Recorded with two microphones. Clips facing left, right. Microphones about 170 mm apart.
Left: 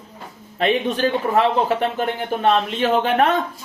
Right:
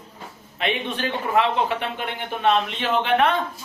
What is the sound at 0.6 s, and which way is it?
A man's voice, 40° left (ahead or behind).